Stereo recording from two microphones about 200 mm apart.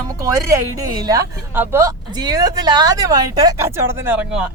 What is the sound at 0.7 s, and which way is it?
A woman's voice, 15° right (ahead or behind).